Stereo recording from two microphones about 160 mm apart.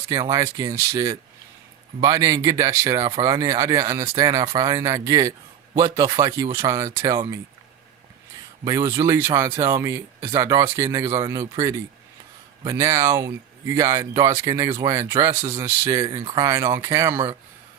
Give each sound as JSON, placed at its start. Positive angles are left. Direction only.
{"t": 0.1, "sound": "speech", "side_deg": -20}
{"t": 8.6, "sound": "speech", "side_deg": -20}